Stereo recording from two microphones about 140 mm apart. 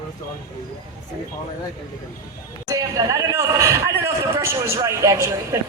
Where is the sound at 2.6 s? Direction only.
25° right (ahead or behind).